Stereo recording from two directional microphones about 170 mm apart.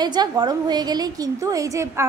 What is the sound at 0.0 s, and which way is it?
A woman's voice, 25° right (ahead or behind).